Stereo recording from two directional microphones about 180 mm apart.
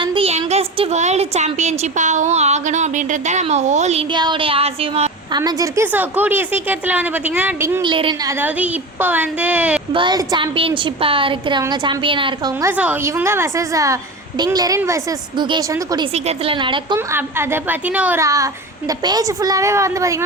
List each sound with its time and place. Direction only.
0.0 s a woman's voice: 30° right (ahead or behind)
4.1 s a woman's voice: 25° right (ahead or behind)
5.3 s a woman's voice: 20° right (ahead or behind)
7.8 s a woman's voice: 30° right (ahead or behind)
8.3 s a woman's voice: 10° right (ahead or behind)
9.9 s a woman's voice: 25° right (ahead or behind)
12.7 s a woman's voice: 10° right (ahead or behind)
16.1 s a woman's voice: 35° right (ahead or behind)
17.1 s a woman's voice: 15° right (ahead or behind)